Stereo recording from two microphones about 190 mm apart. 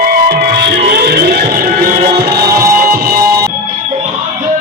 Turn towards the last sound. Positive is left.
turn(degrees=-55)  # may be behind; listen again after turning